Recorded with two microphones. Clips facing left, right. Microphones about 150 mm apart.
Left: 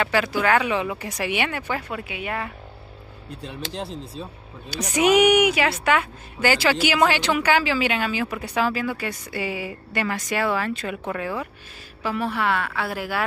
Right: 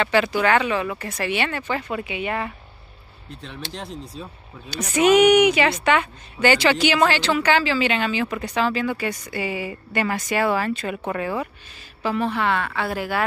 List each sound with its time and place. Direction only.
0.0 s a woman's voice: 5° left (ahead or behind)
0.7 s speech: 15° left (ahead or behind); by 2.5 s centre (ahead or behind)
3.7 s speech: 30° left (ahead or behind)
4.6 s a woman's voice: 10° left (ahead or behind)